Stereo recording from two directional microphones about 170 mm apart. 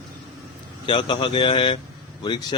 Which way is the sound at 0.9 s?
30° left (ahead or behind).